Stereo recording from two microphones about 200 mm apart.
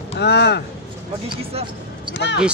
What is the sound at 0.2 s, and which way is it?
Speech, 55° left (ahead or behind).